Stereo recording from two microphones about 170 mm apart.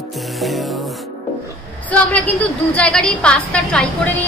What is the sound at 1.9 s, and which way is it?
A woman's voice, 10° left (ahead or behind).